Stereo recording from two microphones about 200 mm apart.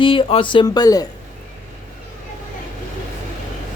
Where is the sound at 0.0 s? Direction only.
25° left (ahead or behind).